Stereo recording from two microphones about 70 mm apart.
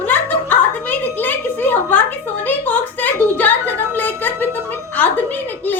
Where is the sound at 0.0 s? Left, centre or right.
Left.